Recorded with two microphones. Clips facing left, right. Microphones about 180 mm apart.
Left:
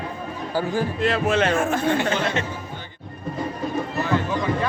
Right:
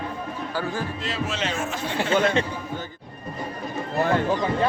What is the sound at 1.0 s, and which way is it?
Speech, 60° left (ahead or behind).